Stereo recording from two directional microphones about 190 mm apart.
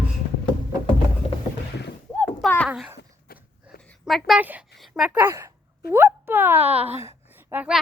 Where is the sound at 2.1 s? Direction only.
5° left (ahead or behind).